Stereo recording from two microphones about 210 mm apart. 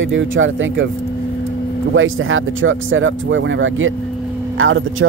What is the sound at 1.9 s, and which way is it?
Speech, 70° right (ahead or behind).